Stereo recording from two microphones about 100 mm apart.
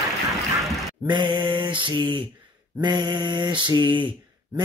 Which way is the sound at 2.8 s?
50° right (ahead or behind).